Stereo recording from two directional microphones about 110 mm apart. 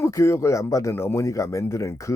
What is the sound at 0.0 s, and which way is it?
Speech, 25° left (ahead or behind).